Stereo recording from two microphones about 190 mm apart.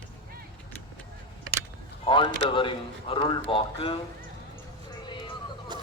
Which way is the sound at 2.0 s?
25° left (ahead or behind).